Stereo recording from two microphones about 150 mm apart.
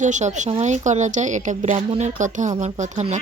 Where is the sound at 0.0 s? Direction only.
55° right (ahead or behind).